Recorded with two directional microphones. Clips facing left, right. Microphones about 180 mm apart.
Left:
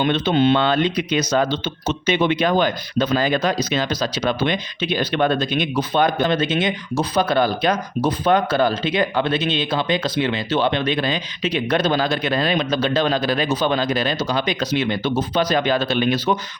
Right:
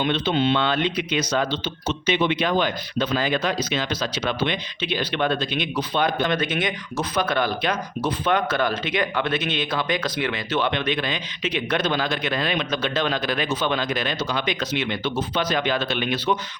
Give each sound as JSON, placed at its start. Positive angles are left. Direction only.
{"t": 0.0, "sound": "speech", "side_deg": 50}
{"t": 6.3, "sound": "speech", "side_deg": 25}